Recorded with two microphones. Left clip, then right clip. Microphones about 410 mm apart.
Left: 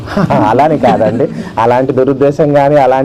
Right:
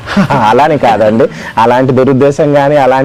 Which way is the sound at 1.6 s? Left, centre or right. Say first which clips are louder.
Right 2 dB; right.